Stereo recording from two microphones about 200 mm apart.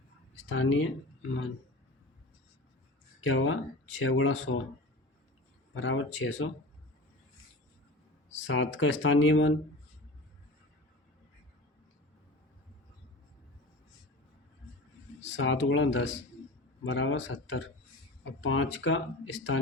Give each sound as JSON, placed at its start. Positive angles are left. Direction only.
{"t": 0.3, "sound": "speech", "side_deg": 85}
{"t": 3.2, "sound": "speech", "side_deg": 85}
{"t": 5.7, "sound": "speech", "side_deg": 80}
{"t": 8.4, "sound": "speech", "side_deg": 80}
{"t": 15.2, "sound": "speech", "side_deg": 75}